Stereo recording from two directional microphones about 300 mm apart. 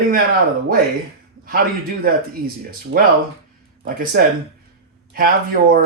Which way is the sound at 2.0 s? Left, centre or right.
Right.